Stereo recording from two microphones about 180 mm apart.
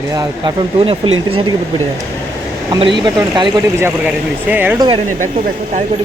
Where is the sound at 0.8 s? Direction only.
30° right (ahead or behind).